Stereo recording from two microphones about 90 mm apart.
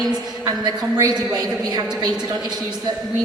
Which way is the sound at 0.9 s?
40° right (ahead or behind).